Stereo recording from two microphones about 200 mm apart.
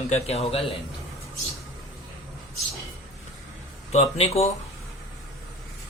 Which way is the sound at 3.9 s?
30° left (ahead or behind).